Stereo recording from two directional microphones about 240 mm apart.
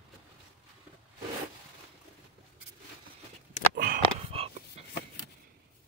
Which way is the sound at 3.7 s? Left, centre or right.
Right.